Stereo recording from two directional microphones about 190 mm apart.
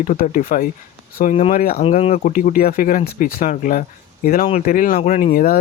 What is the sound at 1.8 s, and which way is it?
Speech, 30° left (ahead or behind).